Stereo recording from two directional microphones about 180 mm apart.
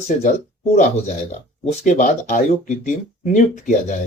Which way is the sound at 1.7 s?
45° left (ahead or behind).